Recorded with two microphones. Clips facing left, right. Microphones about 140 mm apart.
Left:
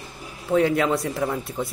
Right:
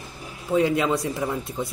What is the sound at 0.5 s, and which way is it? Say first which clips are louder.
Speech: left 1 dB; 20° right (ahead or behind).